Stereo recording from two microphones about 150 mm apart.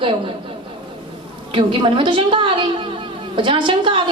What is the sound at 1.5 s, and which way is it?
A man's voice, 35° right (ahead or behind).